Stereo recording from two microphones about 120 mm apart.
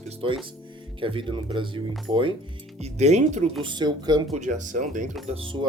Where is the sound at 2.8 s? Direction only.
65° right (ahead or behind).